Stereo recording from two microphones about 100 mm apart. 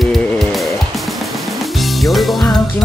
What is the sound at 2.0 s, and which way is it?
Music, centre (ahead or behind).